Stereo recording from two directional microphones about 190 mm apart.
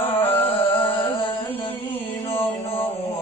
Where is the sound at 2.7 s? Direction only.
30° left (ahead or behind).